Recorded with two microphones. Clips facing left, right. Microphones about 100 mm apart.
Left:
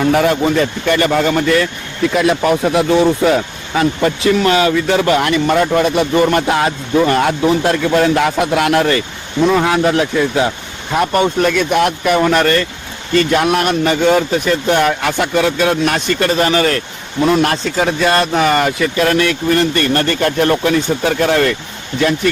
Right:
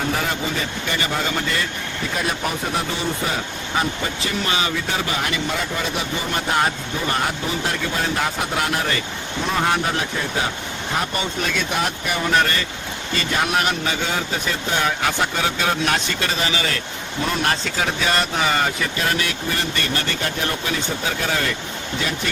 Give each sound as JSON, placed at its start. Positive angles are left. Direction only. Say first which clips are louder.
{"t": 0.0, "sound": "speech", "louder": "left 11 dB", "side_deg": 70}
{"t": 2.1, "sound": "speech", "louder": "left 11 dB", "side_deg": 90}
{"t": 9.6, "sound": "speech", "louder": "left 8 dB", "side_deg": 90}
{"t": 10.9, "sound": "a man's voice", "louder": "left 11 dB", "side_deg": 65}
{"t": 17.4, "sound": "a man's voice", "louder": "left 7 dB", "side_deg": 60}